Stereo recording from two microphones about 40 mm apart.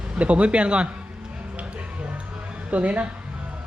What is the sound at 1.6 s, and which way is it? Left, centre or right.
Music, right.